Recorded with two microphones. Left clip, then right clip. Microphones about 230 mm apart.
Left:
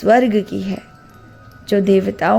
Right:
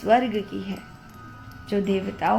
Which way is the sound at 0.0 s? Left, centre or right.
Left.